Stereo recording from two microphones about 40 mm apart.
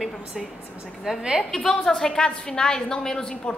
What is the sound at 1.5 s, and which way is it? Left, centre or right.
A woman's voice, centre.